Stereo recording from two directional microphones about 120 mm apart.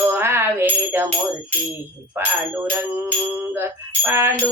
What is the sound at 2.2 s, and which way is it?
Music, 15° right (ahead or behind).